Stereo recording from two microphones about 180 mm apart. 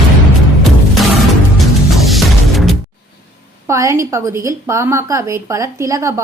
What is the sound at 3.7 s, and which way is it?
A woman's voice, 15° right (ahead or behind).